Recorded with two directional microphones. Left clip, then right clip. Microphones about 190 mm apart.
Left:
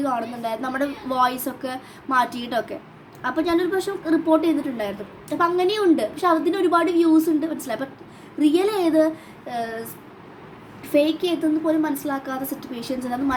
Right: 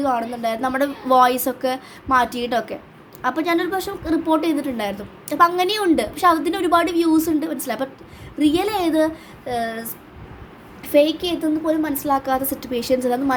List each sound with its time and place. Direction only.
0.0 s a woman's voice: 25° right (ahead or behind)
10.9 s a woman's voice: 20° right (ahead or behind)